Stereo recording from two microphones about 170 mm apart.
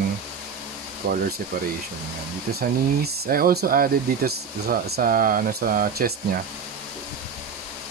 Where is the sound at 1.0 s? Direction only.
60° right (ahead or behind).